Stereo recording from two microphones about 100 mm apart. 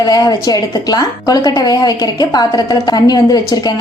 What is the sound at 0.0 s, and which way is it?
A woman's voice, 40° left (ahead or behind).